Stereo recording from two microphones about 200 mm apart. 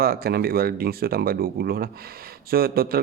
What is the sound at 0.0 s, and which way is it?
A man's voice, 50° right (ahead or behind).